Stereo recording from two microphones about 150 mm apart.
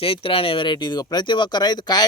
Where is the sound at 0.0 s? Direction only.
40° left (ahead or behind).